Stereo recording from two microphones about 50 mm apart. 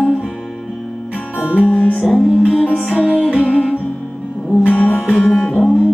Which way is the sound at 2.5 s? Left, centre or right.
Centre.